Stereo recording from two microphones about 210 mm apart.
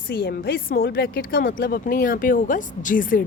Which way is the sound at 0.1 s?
45° left (ahead or behind).